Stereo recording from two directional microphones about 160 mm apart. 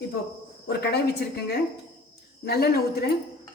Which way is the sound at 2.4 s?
85° left.